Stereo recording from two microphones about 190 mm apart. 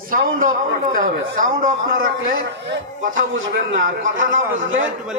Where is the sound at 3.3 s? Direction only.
85° right.